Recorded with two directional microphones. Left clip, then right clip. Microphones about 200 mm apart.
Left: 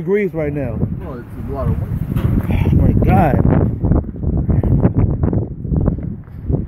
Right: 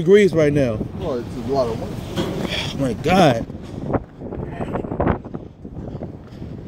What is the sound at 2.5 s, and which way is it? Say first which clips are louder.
Speech: left 6 dB; 30° right (ahead or behind).